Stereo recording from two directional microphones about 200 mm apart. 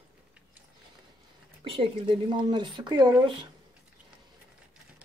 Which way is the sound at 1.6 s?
25° right (ahead or behind).